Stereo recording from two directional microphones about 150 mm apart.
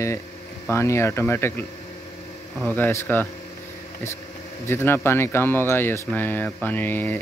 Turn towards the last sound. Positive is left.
turn(degrees=15)  # may be behind; listen again after turning